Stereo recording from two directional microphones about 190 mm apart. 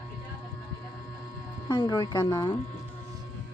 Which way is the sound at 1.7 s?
20° left (ahead or behind).